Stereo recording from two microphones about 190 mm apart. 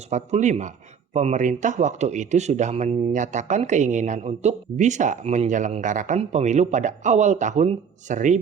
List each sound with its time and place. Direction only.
0.1 s speech: 35° right (ahead or behind)